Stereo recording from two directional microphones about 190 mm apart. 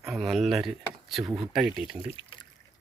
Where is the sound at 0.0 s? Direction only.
Centre (ahead or behind).